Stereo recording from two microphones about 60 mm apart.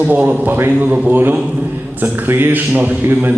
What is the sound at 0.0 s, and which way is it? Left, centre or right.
Speech, right.